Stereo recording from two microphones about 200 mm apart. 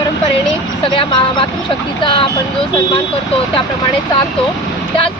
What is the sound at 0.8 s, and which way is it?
Speech, 25° left (ahead or behind).